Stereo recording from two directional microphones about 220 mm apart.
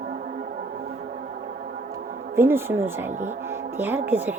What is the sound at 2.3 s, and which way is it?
Speech, 10° right (ahead or behind).